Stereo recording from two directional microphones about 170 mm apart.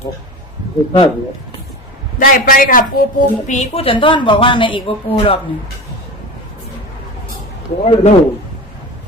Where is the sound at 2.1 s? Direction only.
50° left (ahead or behind); by 4.8 s 30° left (ahead or behind).